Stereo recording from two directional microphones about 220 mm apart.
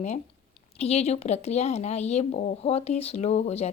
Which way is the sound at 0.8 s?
30° left (ahead or behind).